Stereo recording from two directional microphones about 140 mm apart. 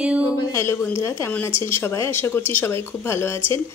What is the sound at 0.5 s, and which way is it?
A woman's voice, 20° left (ahead or behind).